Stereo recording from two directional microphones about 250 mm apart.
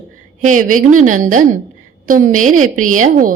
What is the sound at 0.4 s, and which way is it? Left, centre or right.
A woman's voice, right.